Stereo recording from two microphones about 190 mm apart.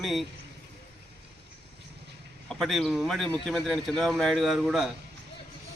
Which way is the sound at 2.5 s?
Centre (ahead or behind).